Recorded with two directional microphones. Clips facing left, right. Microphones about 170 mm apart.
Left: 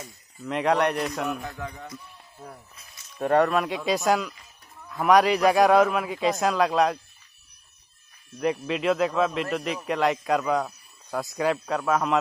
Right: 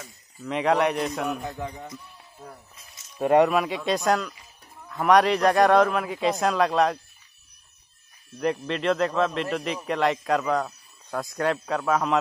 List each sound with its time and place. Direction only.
0.4 s speech: centre (ahead or behind)
1.4 s a man's voice: 20° right (ahead or behind)
3.2 s speech: 10° right (ahead or behind)
8.4 s speech: 5° left (ahead or behind)